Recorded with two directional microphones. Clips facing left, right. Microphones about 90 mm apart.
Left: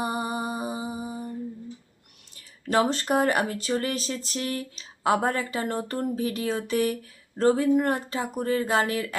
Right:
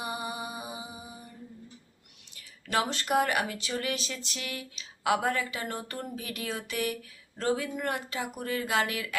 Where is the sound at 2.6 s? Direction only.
35° left (ahead or behind).